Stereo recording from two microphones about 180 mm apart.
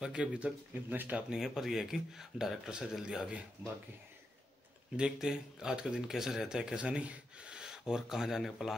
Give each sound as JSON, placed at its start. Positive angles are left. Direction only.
{"t": 0.0, "sound": "speech", "side_deg": -5}
{"t": 4.9, "sound": "speech", "side_deg": -5}